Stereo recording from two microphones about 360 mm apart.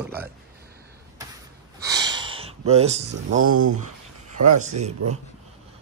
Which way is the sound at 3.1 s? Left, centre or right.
Right.